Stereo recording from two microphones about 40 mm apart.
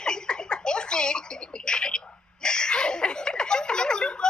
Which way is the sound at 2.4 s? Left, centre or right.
Left.